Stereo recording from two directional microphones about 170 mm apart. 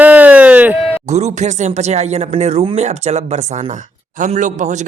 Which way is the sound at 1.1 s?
45° right (ahead or behind).